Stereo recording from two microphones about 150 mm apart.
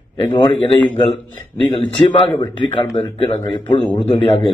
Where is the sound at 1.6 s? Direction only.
35° left (ahead or behind).